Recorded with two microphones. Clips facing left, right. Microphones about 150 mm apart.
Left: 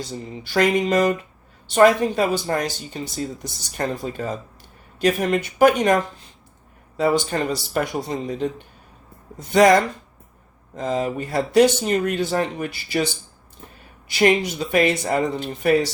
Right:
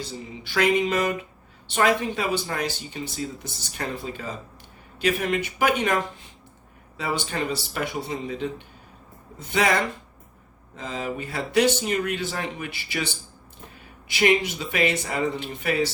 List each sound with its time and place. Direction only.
0.1 s speech: 40° left (ahead or behind)
9.5 s speech: 40° left (ahead or behind)
10.8 s speech: 40° left (ahead or behind)
14.1 s speech: 40° left (ahead or behind)